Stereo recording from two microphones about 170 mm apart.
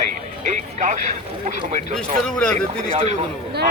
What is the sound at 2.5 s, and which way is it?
Speech, 40° right (ahead or behind).